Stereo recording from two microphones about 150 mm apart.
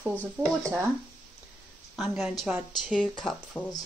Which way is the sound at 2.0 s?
Centre (ahead or behind).